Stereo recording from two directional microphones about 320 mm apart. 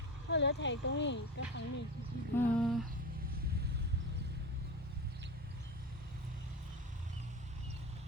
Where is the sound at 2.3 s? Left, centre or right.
Centre.